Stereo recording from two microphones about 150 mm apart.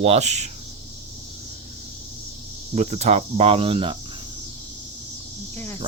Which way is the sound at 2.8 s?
50° right (ahead or behind).